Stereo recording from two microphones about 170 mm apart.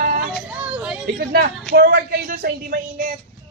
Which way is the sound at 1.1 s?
60° right (ahead or behind).